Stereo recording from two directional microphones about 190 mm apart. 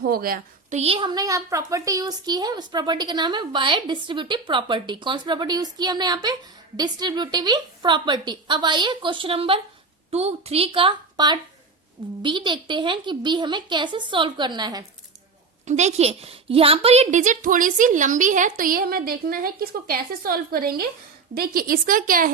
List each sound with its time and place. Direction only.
0.0 s a woman's voice: 50° right (ahead or behind)
0.8 s a woman's voice: 30° right (ahead or behind)
15.6 s a woman's voice: 35° right (ahead or behind)